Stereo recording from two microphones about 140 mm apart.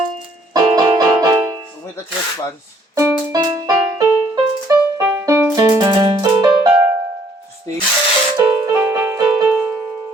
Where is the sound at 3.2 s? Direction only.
25° right (ahead or behind).